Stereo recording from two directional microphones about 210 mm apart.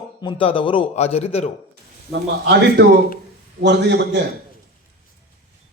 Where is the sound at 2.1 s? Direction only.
55° right (ahead or behind).